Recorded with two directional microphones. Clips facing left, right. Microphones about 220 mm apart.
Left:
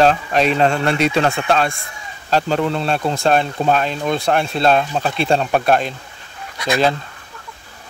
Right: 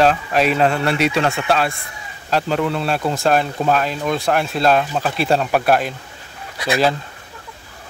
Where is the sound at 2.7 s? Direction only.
5° right (ahead or behind).